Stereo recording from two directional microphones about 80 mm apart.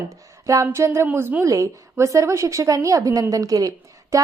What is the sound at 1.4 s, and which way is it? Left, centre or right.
A woman's voice, right.